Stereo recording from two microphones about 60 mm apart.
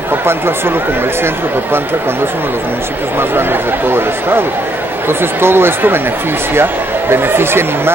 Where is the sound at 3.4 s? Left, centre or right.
Right.